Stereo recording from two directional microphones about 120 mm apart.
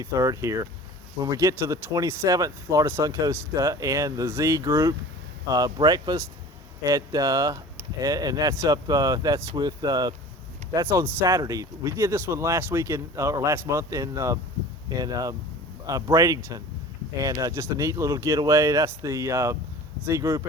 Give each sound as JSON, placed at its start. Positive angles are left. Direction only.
{"t": 0.0, "sound": "speech", "side_deg": -25}
{"t": 10.8, "sound": "speech", "side_deg": -20}